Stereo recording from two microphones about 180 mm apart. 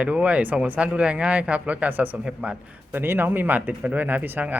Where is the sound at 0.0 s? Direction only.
5° right (ahead or behind).